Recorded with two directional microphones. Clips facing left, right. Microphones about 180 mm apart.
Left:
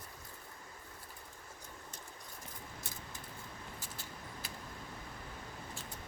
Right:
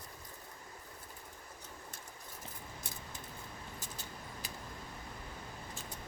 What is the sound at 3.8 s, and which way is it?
Keys jangling, 20° right (ahead or behind).